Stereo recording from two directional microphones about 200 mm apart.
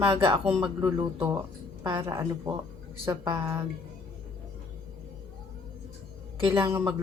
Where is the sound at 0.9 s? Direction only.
15° right (ahead or behind).